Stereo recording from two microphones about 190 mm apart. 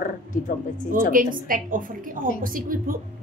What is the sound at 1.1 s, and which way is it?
A woman's voice, 45° right (ahead or behind).